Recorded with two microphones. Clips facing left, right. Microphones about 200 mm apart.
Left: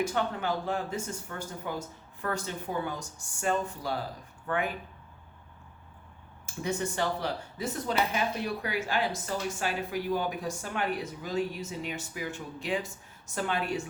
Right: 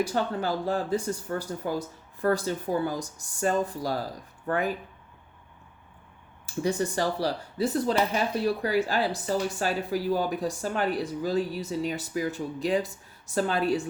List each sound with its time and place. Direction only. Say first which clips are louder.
0.0 s speech: right 3 dB; 35° right (ahead or behind)
6.4 s speech: right 5 dB; 35° right (ahead or behind)